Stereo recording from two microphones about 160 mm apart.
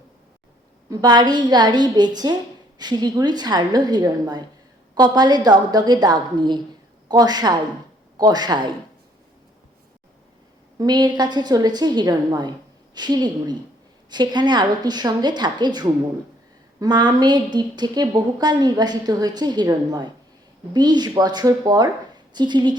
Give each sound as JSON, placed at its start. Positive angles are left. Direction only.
{"t": 0.9, "sound": "a woman's voice", "side_deg": -25}
{"t": 10.8, "sound": "a woman's voice", "side_deg": -25}